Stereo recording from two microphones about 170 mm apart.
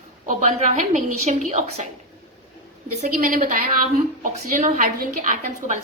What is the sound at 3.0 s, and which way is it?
A woman's voice, 50° right (ahead or behind).